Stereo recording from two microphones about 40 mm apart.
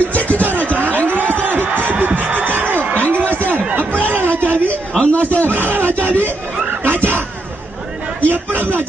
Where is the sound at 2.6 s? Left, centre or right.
Right.